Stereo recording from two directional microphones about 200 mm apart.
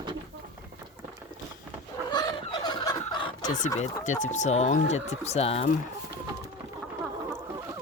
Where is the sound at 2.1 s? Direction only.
20° left (ahead or behind).